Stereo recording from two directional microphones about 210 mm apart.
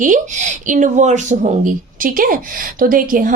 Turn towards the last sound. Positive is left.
turn(degrees=-40)  # may be behind; listen again after turning